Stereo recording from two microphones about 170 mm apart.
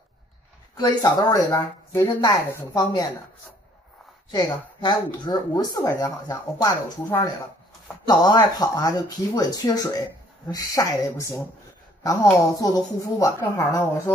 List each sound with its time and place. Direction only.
0.7 s speech: 20° left (ahead or behind)
4.3 s speech: 25° left (ahead or behind)
12.5 s speech: 20° left (ahead or behind)